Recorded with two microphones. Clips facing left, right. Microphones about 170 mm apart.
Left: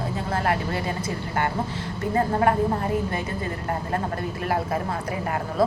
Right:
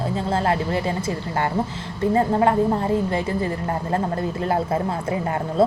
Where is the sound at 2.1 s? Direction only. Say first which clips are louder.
Right 3 dB; 25° right (ahead or behind).